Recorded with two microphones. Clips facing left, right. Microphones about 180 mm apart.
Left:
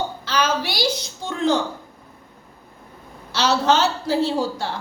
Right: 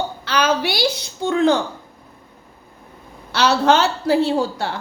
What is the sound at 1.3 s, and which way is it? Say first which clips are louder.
Speech: right 5 dB; 65° right (ahead or behind).